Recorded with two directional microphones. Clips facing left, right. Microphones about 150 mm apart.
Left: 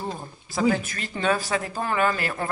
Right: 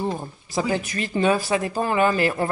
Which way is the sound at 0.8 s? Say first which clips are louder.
Right 4 dB; 15° right (ahead or behind).